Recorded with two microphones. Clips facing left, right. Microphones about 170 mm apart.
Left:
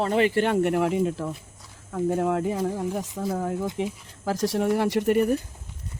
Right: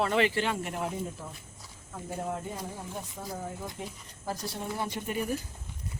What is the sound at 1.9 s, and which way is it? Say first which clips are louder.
Speech: left 12 dB; 75° left (ahead or behind).